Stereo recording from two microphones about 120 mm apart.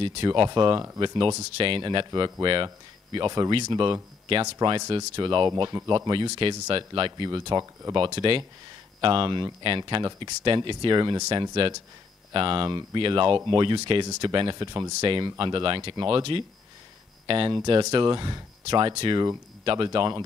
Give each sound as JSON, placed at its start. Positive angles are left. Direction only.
{"t": 0.0, "sound": "speech", "side_deg": -40}